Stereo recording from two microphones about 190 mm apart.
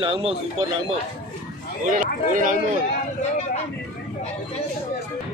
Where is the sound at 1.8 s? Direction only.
45° right (ahead or behind).